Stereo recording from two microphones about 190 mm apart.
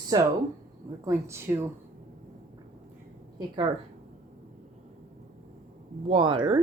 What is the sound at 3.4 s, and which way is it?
Speech, 25° right (ahead or behind).